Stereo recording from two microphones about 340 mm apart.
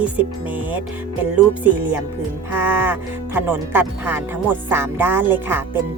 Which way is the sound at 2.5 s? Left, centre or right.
Centre.